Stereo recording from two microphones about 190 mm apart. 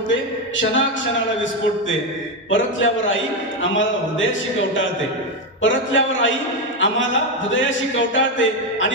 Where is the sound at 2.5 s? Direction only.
80° left.